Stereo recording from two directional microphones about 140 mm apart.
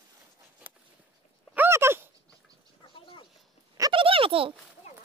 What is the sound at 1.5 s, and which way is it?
Dog, 15° right (ahead or behind).